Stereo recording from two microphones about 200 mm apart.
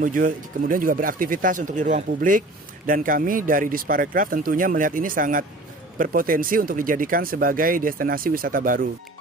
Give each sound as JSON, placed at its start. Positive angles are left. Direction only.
{"t": 0.0, "sound": "speech", "side_deg": -40}